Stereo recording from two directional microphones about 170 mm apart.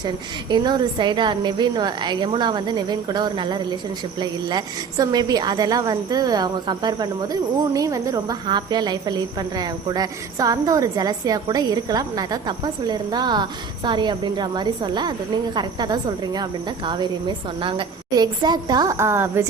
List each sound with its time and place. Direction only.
0.0 s a woman's voice: 25° right (ahead or behind)